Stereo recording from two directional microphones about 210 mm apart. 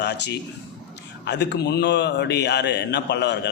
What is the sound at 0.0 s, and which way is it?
A man's voice, 55° left (ahead or behind).